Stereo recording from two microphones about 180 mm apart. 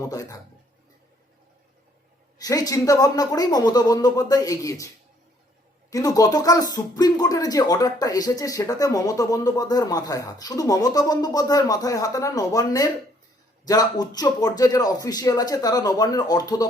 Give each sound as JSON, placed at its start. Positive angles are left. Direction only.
{"t": 0.0, "sound": "speech", "side_deg": 20}
{"t": 2.4, "sound": "speech", "side_deg": 20}
{"t": 5.9, "sound": "speech", "side_deg": 20}